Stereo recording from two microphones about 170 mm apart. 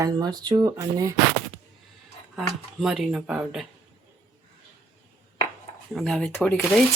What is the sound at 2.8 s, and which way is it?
Speech, 5° right (ahead or behind).